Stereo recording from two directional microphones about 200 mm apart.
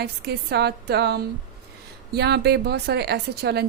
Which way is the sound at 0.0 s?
55° right (ahead or behind).